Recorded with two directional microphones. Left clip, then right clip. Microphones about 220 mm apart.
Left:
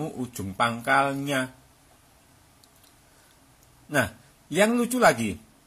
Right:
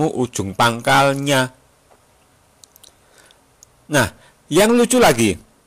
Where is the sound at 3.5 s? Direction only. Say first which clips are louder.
Right 8 dB; 40° right (ahead or behind).